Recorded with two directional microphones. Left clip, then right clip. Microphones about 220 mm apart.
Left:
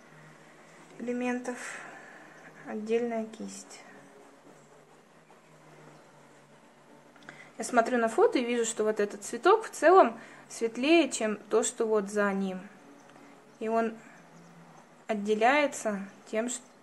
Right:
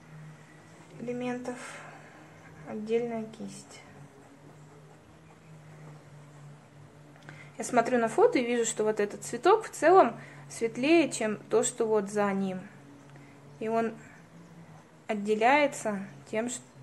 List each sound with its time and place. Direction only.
1.0 s a woman's voice: 20° left (ahead or behind)
7.2 s a woman's voice: centre (ahead or behind)
15.0 s a woman's voice: centre (ahead or behind)